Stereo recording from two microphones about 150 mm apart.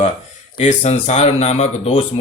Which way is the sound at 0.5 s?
55° left (ahead or behind).